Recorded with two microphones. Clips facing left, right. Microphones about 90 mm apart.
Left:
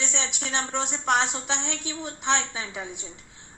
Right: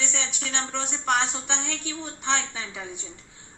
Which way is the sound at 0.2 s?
35° left (ahead or behind).